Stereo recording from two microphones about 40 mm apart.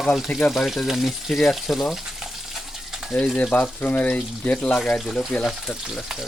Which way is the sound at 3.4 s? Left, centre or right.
Left.